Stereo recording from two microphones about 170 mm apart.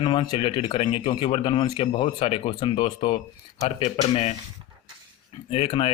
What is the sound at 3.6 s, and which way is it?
Speech, 40° left (ahead or behind).